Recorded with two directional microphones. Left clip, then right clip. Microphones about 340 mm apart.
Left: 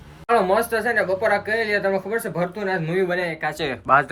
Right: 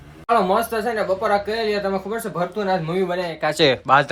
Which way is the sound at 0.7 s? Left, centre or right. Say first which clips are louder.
Left 1 dB; centre.